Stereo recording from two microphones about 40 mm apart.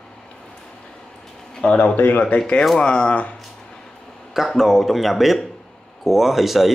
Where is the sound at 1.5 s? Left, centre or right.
Left.